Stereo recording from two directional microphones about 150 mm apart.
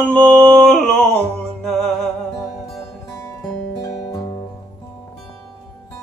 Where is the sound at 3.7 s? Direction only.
25° left (ahead or behind).